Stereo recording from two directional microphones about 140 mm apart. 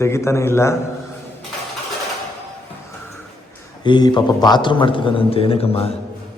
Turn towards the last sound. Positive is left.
turn(degrees=45)  # may be behind; listen again after turning